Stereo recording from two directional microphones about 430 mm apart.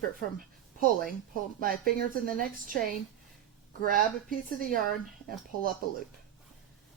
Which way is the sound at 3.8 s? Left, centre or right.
Centre.